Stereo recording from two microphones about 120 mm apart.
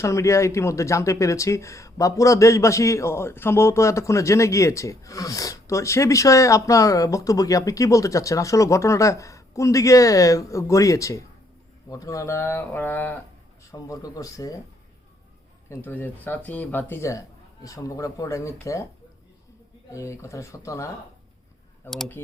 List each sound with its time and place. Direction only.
0.0 s speech: 25° left (ahead or behind)
13.7 s speech: 30° left (ahead or behind)
15.7 s speech: 20° left (ahead or behind)
19.9 s speech: 25° left (ahead or behind)
21.8 s speech: centre (ahead or behind)